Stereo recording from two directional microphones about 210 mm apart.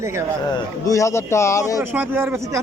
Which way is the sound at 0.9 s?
15° left (ahead or behind).